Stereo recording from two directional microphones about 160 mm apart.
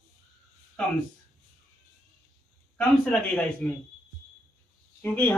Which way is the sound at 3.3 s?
10° left (ahead or behind).